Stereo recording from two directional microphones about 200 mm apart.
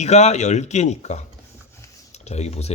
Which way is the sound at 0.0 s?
35° left (ahead or behind).